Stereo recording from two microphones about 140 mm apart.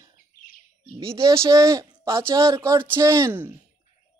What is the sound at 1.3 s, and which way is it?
Speech, 20° right (ahead or behind).